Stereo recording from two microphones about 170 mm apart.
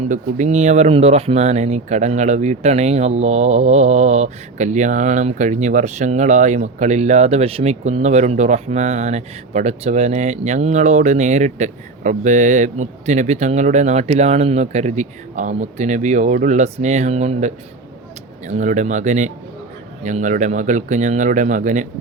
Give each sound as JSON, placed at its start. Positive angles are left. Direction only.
{"t": 0.1, "sound": "speech", "side_deg": -45}